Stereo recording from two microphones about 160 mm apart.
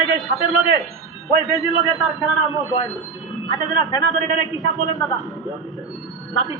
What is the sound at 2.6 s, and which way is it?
Speech, 20° left (ahead or behind).